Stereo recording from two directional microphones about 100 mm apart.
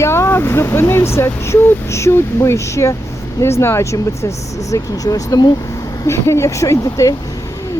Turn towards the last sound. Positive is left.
turn(degrees=30)  # may be behind; listen again after turning